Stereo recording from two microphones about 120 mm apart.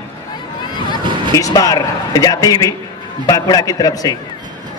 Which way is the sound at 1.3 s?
30° left (ahead or behind).